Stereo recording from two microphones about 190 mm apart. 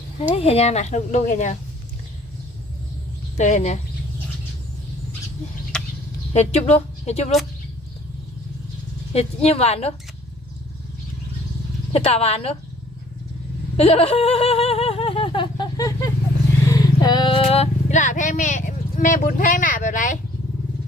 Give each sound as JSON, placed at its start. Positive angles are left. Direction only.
{"t": 0.2, "sound": "speech", "side_deg": 30}
{"t": 3.3, "sound": "speech", "side_deg": 40}
{"t": 5.7, "sound": "chicken", "side_deg": 5}
{"t": 6.3, "sound": "speech", "side_deg": 35}
{"t": 9.1, "sound": "speech", "side_deg": 35}
{"t": 11.9, "sound": "speech", "side_deg": 30}
{"t": 13.7, "sound": "a sound", "side_deg": 30}
{"t": 16.6, "sound": "speech", "side_deg": 20}